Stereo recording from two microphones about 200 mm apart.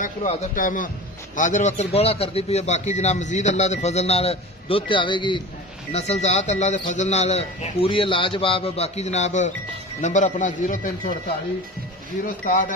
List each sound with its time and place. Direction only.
0.6 s a man's voice: 40° left (ahead or behind)
12.3 s a man's voice: 40° left (ahead or behind)